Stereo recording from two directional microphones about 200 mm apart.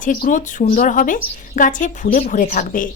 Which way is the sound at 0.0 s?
40° left (ahead or behind).